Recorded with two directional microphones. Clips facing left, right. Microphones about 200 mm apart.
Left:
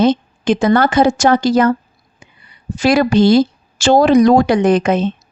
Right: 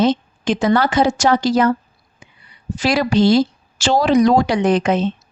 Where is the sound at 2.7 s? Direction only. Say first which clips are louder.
Left 4 dB; 50° left (ahead or behind).